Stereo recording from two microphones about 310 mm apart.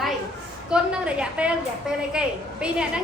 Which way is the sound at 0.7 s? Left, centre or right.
Centre.